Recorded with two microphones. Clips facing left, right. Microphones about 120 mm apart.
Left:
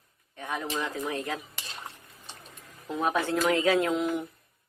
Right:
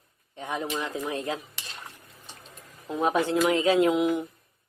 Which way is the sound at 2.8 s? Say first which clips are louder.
Right 3 dB; 20° right (ahead or behind).